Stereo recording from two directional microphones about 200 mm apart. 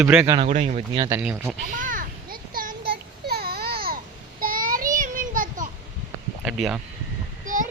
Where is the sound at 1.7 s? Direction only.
40° right (ahead or behind).